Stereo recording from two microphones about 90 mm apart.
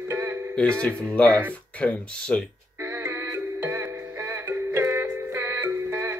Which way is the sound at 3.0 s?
25° right (ahead or behind).